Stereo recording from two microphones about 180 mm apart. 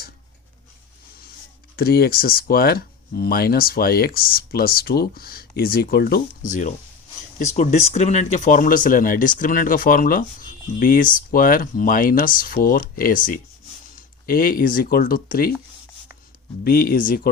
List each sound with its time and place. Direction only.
1.7 s speech: 60° left (ahead or behind)
6.4 s speech: 45° left (ahead or behind)
16.6 s speech: 55° left (ahead or behind)